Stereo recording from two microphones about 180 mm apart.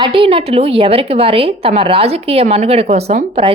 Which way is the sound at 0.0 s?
30° right (ahead or behind).